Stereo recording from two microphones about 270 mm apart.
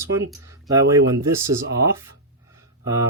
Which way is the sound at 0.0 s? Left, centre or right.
Centre.